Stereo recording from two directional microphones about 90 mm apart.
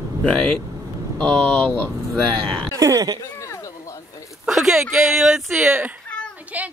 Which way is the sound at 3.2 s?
35° left (ahead or behind).